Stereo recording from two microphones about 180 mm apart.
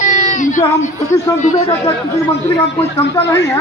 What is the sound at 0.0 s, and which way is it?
Child singing, 45° left (ahead or behind).